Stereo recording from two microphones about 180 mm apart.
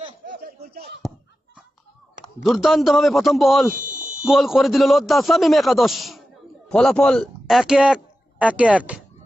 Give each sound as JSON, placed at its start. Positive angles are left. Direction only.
{"t": 0.3, "sound": "a sound", "side_deg": -60}
{"t": 2.4, "sound": "a man's voice", "side_deg": 0}
{"t": 3.8, "sound": "buzzer", "side_deg": -45}
{"t": 4.3, "sound": "a man's voice", "side_deg": 0}